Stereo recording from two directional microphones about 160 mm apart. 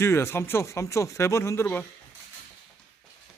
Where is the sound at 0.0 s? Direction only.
15° left (ahead or behind).